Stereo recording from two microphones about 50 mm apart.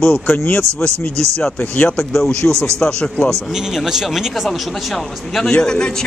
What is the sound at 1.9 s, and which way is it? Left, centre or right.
Speech, centre.